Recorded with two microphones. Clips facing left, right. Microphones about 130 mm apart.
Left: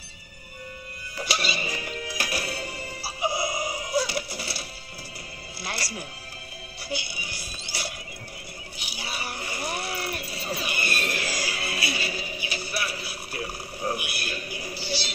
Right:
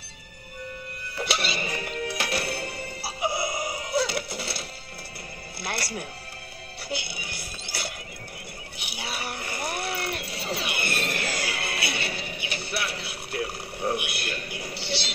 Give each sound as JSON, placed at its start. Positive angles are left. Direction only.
{"t": 1.2, "sound": "music", "side_deg": -65}
{"t": 7.2, "sound": "speech", "side_deg": -60}
{"t": 8.7, "sound": "a sound", "side_deg": -65}